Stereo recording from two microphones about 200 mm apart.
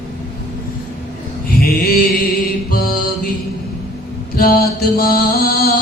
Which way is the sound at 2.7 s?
50° left (ahead or behind).